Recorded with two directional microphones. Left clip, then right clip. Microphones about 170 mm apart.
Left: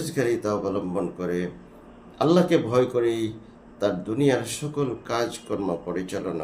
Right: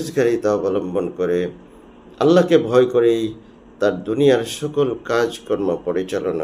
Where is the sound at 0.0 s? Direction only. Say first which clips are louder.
Right 7 dB; 20° left (ahead or behind).